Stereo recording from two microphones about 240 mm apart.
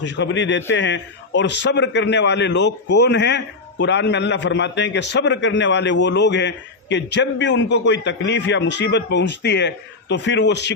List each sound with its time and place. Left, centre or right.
0.0 s a man's voice: left